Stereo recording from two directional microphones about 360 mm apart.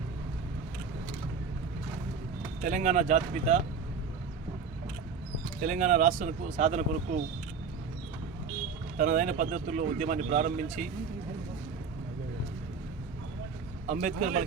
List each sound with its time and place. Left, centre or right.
2.6 s speech: right
5.6 s speech: right
9.0 s speech: right
13.8 s speech: centre